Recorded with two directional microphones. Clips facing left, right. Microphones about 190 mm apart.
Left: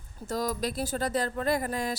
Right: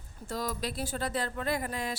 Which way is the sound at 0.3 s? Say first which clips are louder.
Left 4 dB; 40° left (ahead or behind).